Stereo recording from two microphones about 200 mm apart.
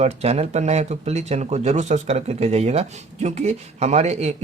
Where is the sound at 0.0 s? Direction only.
30° right (ahead or behind).